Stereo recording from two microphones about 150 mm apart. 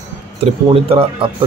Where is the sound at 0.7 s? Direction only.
35° right (ahead or behind).